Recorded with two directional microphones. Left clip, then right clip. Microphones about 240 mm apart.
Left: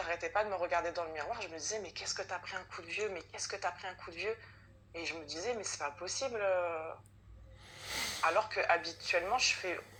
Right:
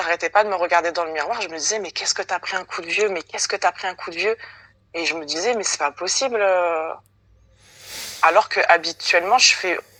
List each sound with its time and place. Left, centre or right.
0.0 s speech: right
7.8 s a sound: centre
8.2 s speech: right